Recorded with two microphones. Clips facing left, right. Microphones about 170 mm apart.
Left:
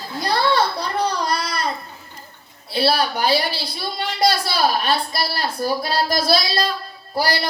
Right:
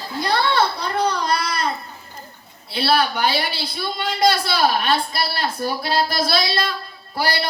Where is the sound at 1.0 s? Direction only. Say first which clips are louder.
Right 2 dB; 35° left (ahead or behind).